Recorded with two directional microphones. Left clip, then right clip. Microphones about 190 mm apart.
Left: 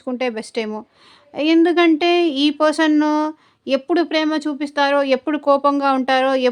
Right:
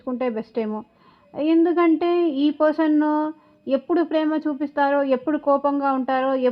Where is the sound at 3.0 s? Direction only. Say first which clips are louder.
Left 3 dB; 20° left (ahead or behind).